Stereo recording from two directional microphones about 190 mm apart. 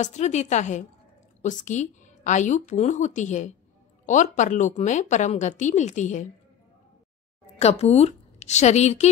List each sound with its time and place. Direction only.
0.0 s speech: 40° left (ahead or behind)
7.5 s a woman's voice: 35° left (ahead or behind)